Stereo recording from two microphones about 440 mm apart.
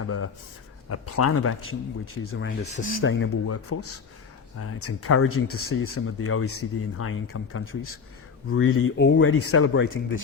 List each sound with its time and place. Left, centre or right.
0.9 s speech: left